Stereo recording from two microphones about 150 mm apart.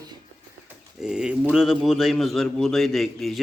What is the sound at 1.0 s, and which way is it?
A man's voice, 5° right (ahead or behind).